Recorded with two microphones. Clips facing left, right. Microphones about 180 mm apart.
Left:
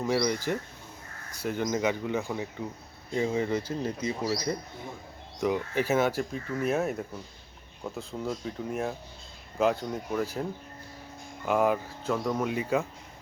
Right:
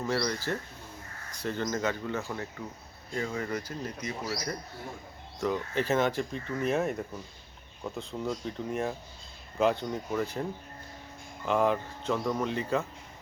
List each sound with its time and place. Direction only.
0.0 s speech: 15° left (ahead or behind)
5.4 s speech: 10° left (ahead or behind)
11.4 s speech: 5° left (ahead or behind)